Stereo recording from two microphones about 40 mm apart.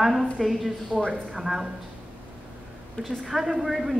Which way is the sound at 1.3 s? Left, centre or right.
Centre.